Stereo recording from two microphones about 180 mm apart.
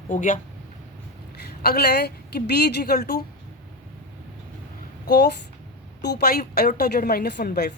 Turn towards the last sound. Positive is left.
turn(degrees=60)  # may be behind; listen again after turning